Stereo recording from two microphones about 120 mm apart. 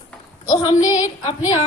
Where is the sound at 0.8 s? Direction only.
30° left (ahead or behind).